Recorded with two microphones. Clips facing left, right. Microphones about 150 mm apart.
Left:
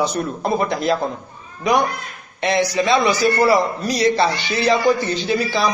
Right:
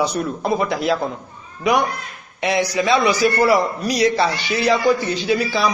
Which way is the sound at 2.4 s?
10° right (ahead or behind).